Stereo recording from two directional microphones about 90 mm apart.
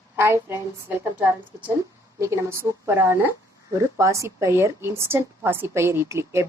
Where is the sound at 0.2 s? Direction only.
25° right (ahead or behind).